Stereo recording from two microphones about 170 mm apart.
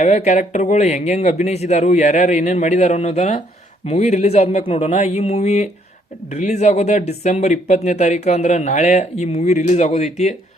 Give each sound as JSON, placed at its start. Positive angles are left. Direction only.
{"t": 0.0, "sound": "speech", "side_deg": 40}